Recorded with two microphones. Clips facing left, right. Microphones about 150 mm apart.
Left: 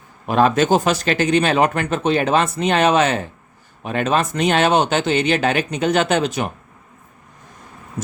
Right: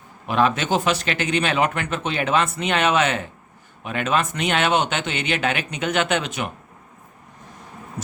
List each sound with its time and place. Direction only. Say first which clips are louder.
0.3 s speech: left 5 dB; 40° left (ahead or behind)